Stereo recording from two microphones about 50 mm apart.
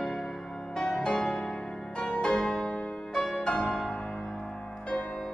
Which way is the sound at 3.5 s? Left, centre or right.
Left.